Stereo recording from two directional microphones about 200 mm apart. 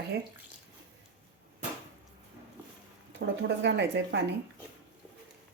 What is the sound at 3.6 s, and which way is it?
Speech, 60° right (ahead or behind).